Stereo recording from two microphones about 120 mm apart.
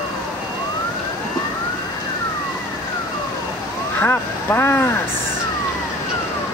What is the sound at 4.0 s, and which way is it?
Speech, 20° left (ahead or behind).